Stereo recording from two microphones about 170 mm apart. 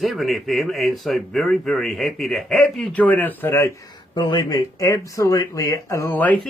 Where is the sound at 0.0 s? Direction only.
Centre (ahead or behind).